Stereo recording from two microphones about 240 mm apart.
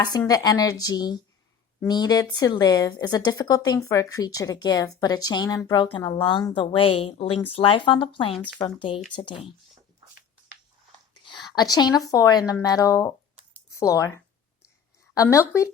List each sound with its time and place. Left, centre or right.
0.2 s a woman's voice: centre
8.3 s speech: centre
8.5 s speech: centre
11.1 s speech: centre
13.5 s a sound: centre
15.1 s a woman's voice: centre